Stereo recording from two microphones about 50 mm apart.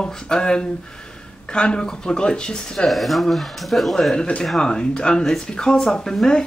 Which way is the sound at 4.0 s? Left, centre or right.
Centre.